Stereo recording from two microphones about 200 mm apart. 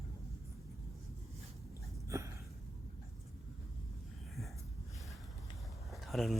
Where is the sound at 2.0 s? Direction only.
15° right (ahead or behind).